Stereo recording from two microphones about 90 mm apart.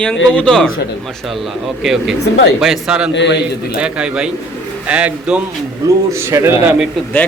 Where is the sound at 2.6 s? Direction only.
5° right (ahead or behind).